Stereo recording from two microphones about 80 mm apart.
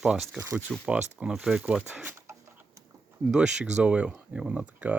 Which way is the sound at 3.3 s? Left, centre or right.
Centre.